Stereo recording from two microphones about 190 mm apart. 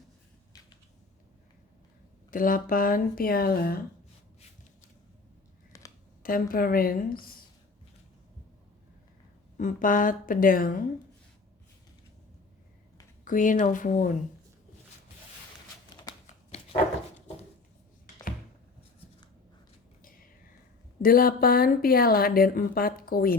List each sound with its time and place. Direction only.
2.3 s speech: 45° left (ahead or behind)
5.7 s a sound: 15° left (ahead or behind)
6.2 s speech: 50° left (ahead or behind)
9.6 s speech: 45° left (ahead or behind)
13.2 s speech: 45° left (ahead or behind)
21.0 s speech: 50° left (ahead or behind)